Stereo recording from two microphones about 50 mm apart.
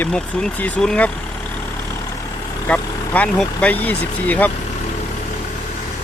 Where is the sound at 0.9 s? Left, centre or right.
Left.